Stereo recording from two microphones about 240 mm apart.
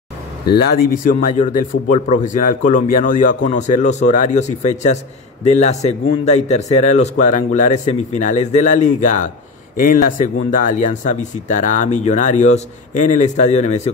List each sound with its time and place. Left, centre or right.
0.5 s a man's voice: left